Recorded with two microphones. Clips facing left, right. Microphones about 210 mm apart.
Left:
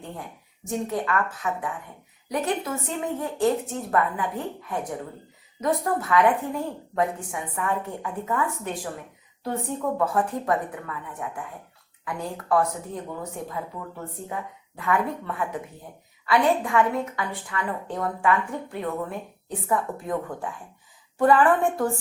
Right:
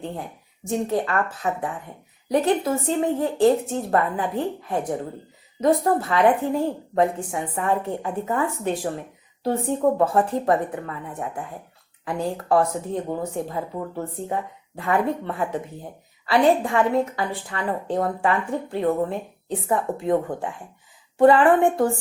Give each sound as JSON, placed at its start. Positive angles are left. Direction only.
{"t": 0.7, "sound": "a woman's voice", "side_deg": -30}